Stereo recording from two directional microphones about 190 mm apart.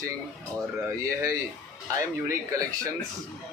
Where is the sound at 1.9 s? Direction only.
15° right (ahead or behind).